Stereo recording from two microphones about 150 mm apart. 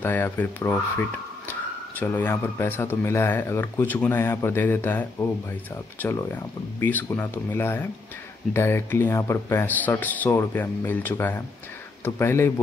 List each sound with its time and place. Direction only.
0.0 s speech: 10° left (ahead or behind)